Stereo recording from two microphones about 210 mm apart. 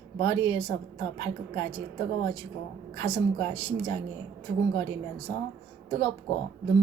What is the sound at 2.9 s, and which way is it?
Speech, 20° left (ahead or behind).